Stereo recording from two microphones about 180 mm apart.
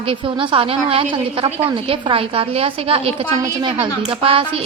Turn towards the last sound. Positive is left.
turn(degrees=-30)  # may be behind; listen again after turning